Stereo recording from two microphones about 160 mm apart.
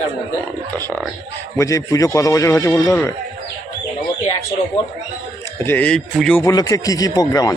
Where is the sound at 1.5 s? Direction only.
20° left (ahead or behind).